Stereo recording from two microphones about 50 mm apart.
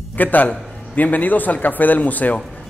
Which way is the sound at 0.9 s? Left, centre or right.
Left.